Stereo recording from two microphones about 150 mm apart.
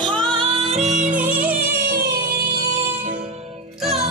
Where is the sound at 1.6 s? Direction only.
85° right.